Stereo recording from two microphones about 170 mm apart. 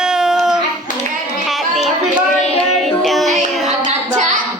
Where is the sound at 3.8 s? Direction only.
45° right (ahead or behind).